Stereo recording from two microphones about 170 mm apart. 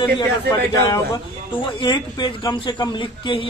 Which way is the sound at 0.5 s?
25° left (ahead or behind).